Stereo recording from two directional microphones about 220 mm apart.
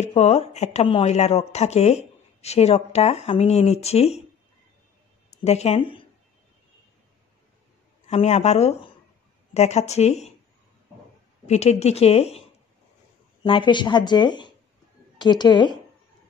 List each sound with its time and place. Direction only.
0.0 s speech: 30° left (ahead or behind)
5.4 s speech: 30° left (ahead or behind)
8.1 s speech: 30° left (ahead or behind)
11.4 s speech: 30° left (ahead or behind)